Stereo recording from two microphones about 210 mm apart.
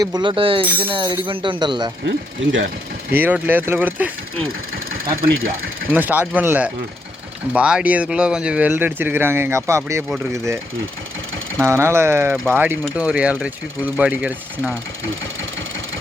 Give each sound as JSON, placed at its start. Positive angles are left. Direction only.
{"t": 0.0, "sound": "speech", "side_deg": -20}
{"t": 2.0, "sound": "speech", "side_deg": -65}
{"t": 3.1, "sound": "speech", "side_deg": -10}
{"t": 5.9, "sound": "speech", "side_deg": -10}